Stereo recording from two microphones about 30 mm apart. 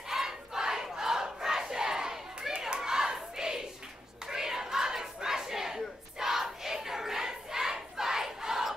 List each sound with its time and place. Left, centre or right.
0.1 s battle cry: centre